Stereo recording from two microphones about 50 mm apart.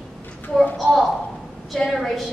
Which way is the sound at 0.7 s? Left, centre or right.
Centre.